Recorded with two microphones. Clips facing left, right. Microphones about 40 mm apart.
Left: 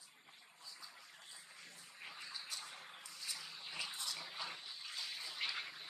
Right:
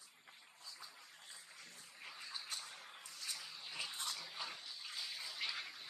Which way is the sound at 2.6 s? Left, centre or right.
Left.